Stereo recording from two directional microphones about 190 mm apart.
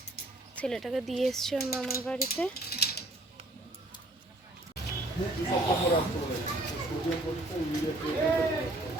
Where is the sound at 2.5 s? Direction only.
55° left (ahead or behind).